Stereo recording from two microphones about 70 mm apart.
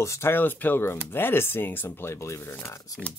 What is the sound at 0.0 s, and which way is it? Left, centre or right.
Speech, left.